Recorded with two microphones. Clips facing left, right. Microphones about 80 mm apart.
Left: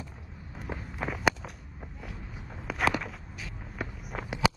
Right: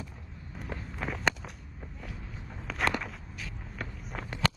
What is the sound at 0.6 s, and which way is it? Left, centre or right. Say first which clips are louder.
Walk: left 2 dB; centre.